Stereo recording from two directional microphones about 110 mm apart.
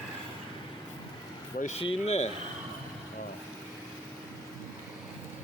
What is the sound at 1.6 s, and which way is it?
Speech, 65° left (ahead or behind).